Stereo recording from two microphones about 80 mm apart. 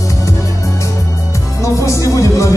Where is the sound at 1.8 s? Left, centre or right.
Left.